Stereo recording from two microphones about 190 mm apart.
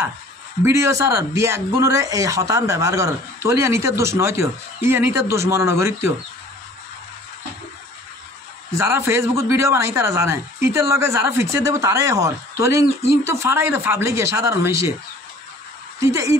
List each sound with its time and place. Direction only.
0.7 s speech: 15° right (ahead or behind)
8.7 s speech: 15° right (ahead or behind)
16.0 s speech: 15° right (ahead or behind)